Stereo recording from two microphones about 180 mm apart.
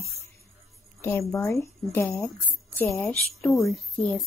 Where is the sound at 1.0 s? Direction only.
15° left (ahead or behind).